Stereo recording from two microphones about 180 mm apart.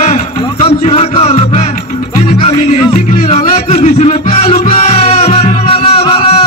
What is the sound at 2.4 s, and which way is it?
Music, 40° left (ahead or behind).